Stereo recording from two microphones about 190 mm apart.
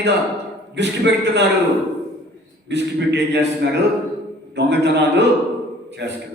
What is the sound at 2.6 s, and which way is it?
Speech, 65° right (ahead or behind).